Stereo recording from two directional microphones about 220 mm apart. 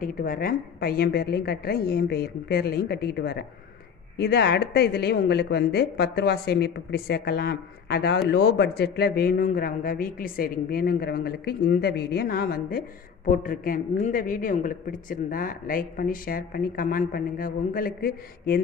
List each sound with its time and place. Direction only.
0.0 s speech: 40° left (ahead or behind)